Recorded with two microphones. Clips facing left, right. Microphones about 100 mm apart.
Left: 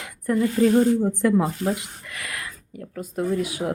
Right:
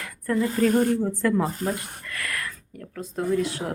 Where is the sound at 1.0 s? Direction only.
20° left (ahead or behind).